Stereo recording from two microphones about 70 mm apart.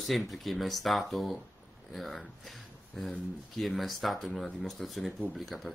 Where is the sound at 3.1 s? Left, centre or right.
Centre.